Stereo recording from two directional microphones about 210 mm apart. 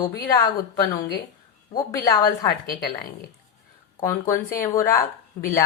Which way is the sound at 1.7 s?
15° left (ahead or behind).